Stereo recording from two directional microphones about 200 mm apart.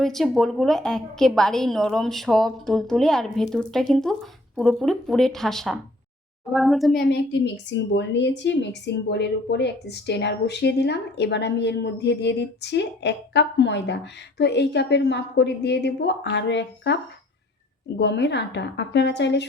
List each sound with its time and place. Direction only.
0.0 s a woman's voice: centre (ahead or behind)
7.0 s a woman's voice: 55° left (ahead or behind)